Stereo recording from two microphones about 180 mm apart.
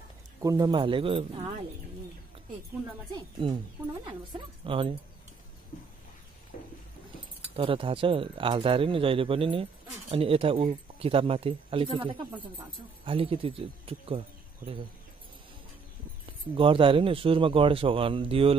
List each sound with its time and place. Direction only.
0.4 s speech: 20° right (ahead or behind)
3.4 s speech: 30° right (ahead or behind)
7.5 s speech: 30° right (ahead or behind)
16.5 s speech: 30° right (ahead or behind)